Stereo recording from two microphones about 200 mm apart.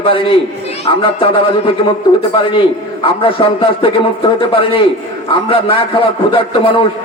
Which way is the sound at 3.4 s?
25° left (ahead or behind).